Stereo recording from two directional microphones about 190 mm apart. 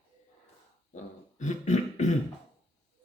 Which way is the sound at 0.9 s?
40° left (ahead or behind).